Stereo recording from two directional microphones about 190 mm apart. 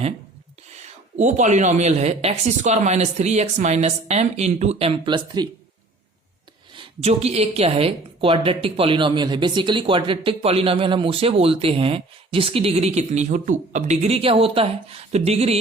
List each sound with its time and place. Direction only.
0.8 s speech: 40° right (ahead or behind); by 5.5 s 20° right (ahead or behind)
6.7 s a woman's voice: 30° right (ahead or behind)